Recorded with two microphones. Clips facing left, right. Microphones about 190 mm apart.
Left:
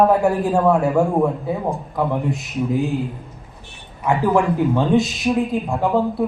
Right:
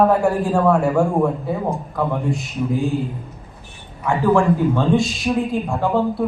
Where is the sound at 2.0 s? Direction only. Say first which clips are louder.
Left 1 dB; 20° left (ahead or behind).